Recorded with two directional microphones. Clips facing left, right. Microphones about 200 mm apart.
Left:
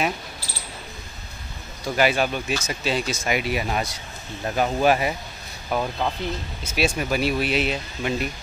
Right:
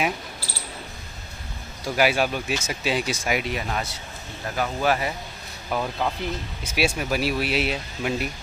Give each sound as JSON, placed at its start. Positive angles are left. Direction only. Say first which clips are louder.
{"t": 1.9, "sound": "speech", "louder": "left 1 dB", "side_deg": -5}
{"t": 3.3, "sound": "speech", "louder": "left 3 dB", "side_deg": 10}
{"t": 5.7, "sound": "speech", "louder": "left 1 dB", "side_deg": 5}
{"t": 6.6, "sound": "speech", "louder": "left 1 dB", "side_deg": -15}
{"t": 7.0, "sound": "speech", "louder": "left 2 dB", "side_deg": 0}